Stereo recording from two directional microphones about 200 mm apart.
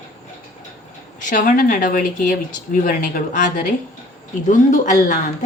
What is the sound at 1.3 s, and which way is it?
Speech, 40° left (ahead or behind).